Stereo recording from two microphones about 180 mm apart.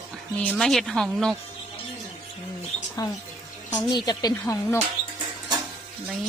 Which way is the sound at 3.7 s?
25° left (ahead or behind).